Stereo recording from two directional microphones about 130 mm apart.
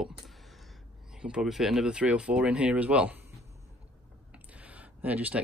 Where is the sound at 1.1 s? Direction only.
5° right (ahead or behind).